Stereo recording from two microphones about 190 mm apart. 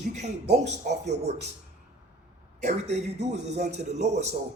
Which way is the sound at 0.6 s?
35° right (ahead or behind).